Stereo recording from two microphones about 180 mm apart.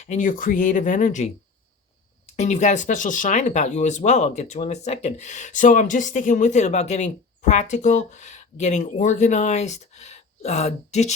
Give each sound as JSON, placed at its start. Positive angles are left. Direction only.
{"t": 0.0, "sound": "speech", "side_deg": 45}